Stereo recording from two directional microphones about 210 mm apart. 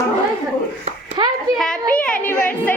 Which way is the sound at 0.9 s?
30° right (ahead or behind).